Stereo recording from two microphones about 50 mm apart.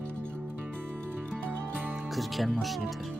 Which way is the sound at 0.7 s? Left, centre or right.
Centre.